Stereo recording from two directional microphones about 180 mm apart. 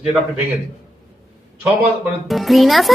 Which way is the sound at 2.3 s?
Centre (ahead or behind).